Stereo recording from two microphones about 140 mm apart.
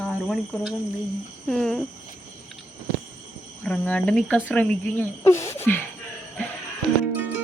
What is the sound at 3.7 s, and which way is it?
Speech, 10° left (ahead or behind).